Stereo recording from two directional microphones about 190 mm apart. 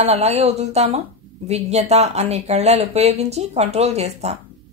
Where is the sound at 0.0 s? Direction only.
35° right (ahead or behind).